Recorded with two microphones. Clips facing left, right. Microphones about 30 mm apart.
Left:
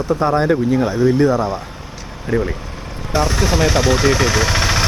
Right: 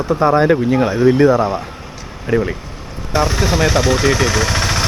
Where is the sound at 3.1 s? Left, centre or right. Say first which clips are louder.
Right 1 dB; centre.